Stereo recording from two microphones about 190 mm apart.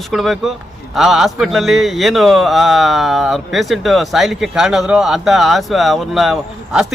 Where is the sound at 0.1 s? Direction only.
Centre (ahead or behind).